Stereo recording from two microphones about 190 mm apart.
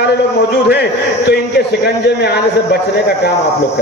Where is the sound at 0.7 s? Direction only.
60° left (ahead or behind).